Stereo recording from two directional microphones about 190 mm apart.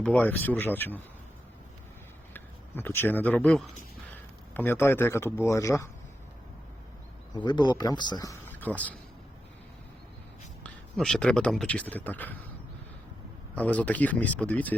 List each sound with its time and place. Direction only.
0.0 s speech: 5° left (ahead or behind)
2.3 s speech: 10° left (ahead or behind)
7.3 s speech: 25° left (ahead or behind); by 9.0 s 10° left (ahead or behind)
10.6 s speech: 5° left (ahead or behind)
13.6 s speech: 5° left (ahead or behind)